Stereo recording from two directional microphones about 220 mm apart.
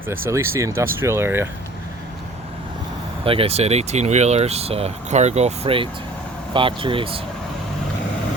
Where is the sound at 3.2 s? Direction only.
25° right (ahead or behind).